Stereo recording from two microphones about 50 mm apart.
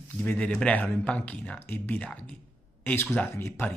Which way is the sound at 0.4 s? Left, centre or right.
Centre.